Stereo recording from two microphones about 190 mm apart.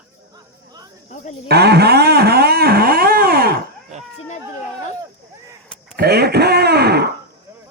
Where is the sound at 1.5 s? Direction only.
60° right (ahead or behind).